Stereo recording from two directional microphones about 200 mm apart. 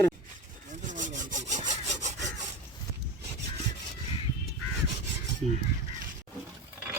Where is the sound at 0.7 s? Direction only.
40° right (ahead or behind).